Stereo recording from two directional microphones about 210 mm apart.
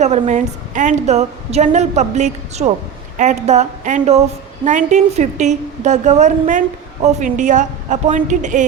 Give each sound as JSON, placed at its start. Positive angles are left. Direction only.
{"t": 0.0, "sound": "a woman's voice", "side_deg": -35}